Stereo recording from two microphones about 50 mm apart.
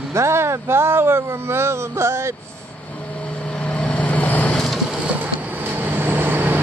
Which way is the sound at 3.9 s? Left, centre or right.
Left.